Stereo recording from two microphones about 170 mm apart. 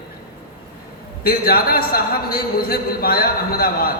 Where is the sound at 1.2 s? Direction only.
60° left (ahead or behind).